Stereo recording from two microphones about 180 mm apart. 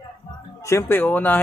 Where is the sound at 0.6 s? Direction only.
15° left (ahead or behind).